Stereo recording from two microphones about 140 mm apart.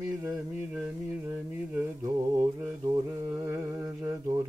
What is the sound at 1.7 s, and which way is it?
Mantra, 20° right (ahead or behind).